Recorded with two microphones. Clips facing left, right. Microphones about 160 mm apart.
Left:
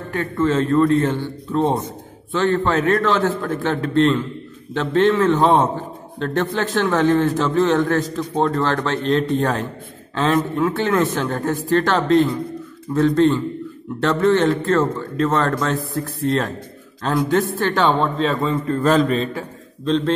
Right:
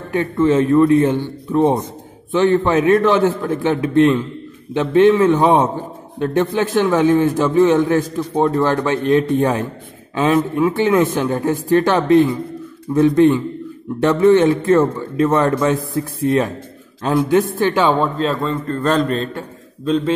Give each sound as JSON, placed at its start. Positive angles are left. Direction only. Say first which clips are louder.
{"t": 0.1, "sound": "a man's voice", "louder": "right 4 dB", "side_deg": -15}